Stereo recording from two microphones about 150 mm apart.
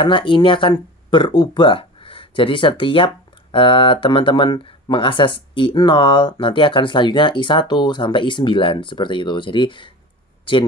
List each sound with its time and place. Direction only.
0.0 s speech: 35° left (ahead or behind)